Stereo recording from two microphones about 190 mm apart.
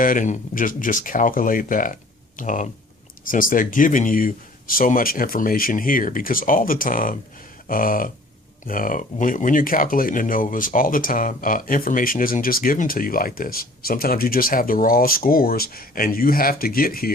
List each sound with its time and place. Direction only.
0.0 s speech: 45° left (ahead or behind)